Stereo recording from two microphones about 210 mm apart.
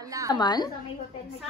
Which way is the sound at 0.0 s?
15° right (ahead or behind).